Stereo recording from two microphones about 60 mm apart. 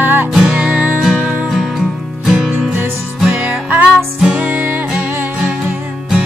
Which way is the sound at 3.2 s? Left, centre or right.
Right.